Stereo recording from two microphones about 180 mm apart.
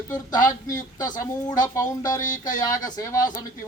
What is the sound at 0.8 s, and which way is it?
Speech, 20° left (ahead or behind).